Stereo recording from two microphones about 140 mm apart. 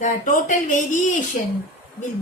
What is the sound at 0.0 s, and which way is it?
Speech, 65° left (ahead or behind).